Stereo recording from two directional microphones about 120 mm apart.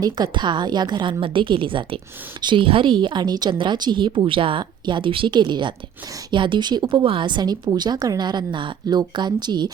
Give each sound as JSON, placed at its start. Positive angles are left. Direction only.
{"t": 0.0, "sound": "speech", "side_deg": -35}